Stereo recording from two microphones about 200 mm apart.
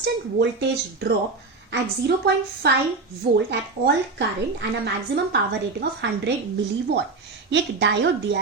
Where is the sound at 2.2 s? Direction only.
55° right (ahead or behind).